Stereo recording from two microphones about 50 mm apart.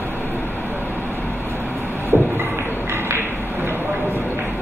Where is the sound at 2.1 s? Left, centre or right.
Right.